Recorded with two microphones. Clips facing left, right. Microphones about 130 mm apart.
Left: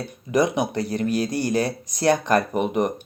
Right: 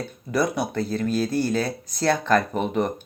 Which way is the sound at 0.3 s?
20° left (ahead or behind).